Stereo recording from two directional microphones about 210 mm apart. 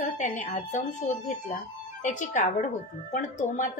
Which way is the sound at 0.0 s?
35° left (ahead or behind).